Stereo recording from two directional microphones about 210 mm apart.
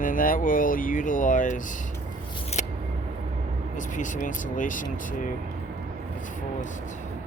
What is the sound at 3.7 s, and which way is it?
Speech, 35° left (ahead or behind).